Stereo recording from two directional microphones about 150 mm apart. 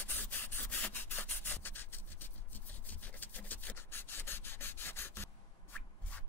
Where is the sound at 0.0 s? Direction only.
10° left (ahead or behind).